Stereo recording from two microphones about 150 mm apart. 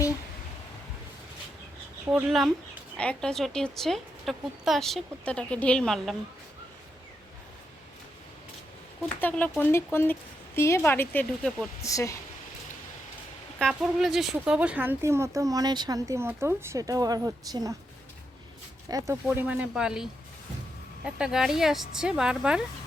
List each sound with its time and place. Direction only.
2.0 s speech: 5° right (ahead or behind)
9.2 s speech: 10° left (ahead or behind)
11.8 s speech: 20° left (ahead or behind)
13.6 s speech: centre (ahead or behind); by 17.7 s 25° right (ahead or behind)
18.9 s speech: 25° right (ahead or behind)
19.3 s speech: 10° right (ahead or behind)